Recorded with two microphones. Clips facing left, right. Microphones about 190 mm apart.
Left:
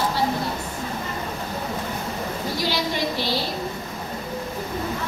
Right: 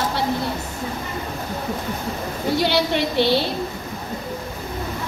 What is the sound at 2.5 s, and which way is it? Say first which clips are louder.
Speech: right 7 dB; 65° right (ahead or behind).